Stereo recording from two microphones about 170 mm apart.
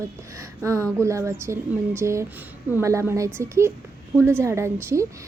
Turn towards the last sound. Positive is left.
turn(degrees=-15)  # may be behind; listen again after turning